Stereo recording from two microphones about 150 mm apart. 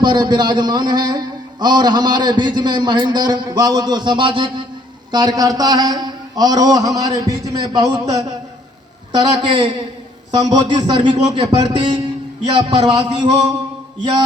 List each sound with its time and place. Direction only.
0.0 s a man's voice: 30° right (ahead or behind)
9.5 s a man's voice: 35° right (ahead or behind)